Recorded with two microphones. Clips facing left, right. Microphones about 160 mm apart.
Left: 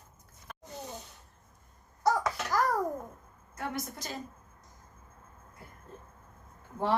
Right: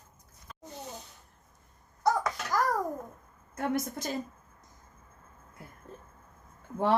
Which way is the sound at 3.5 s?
50° right (ahead or behind).